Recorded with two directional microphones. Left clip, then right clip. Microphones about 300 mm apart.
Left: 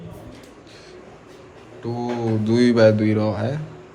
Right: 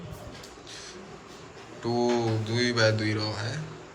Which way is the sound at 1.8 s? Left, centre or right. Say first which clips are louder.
Right 1 dB; centre.